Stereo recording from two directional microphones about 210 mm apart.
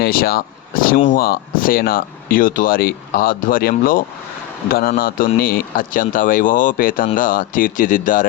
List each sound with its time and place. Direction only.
0.0 s speech: 45° left (ahead or behind)